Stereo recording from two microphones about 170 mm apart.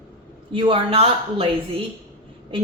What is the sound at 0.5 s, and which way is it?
Speech, 30° right (ahead or behind).